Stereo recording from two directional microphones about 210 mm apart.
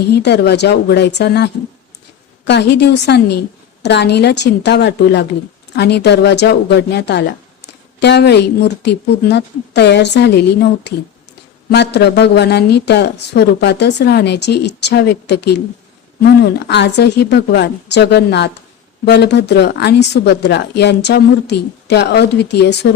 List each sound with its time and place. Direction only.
0.1 s a woman's voice: 50° left (ahead or behind)
11.7 s a woman's voice: 50° left (ahead or behind)